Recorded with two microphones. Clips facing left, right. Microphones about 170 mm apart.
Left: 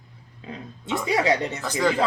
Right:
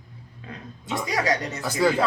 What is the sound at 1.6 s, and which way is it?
Speech, 10° right (ahead or behind).